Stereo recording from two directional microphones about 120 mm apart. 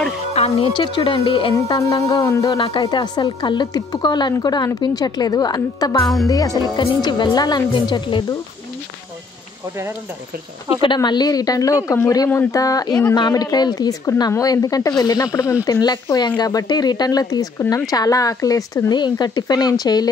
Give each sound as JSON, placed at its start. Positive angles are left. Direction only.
{"t": 0.3, "sound": "music", "side_deg": 60}
{"t": 0.7, "sound": "speech", "side_deg": 40}
{"t": 1.7, "sound": "a sound", "side_deg": 30}
{"t": 2.8, "sound": "speech", "side_deg": 35}
{"t": 6.2, "sound": "a sound", "side_deg": 30}
{"t": 6.6, "sound": "speech", "side_deg": 40}
{"t": 11.0, "sound": "speech", "side_deg": 35}
{"t": 12.3, "sound": "a sound", "side_deg": 25}
{"t": 13.1, "sound": "speech", "side_deg": 35}